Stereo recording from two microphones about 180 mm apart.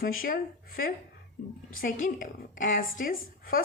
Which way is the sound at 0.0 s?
50° left (ahead or behind).